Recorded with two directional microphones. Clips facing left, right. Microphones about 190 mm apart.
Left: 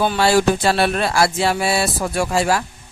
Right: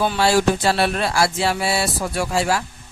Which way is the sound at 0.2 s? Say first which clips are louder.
Left 2 dB; 55° left (ahead or behind).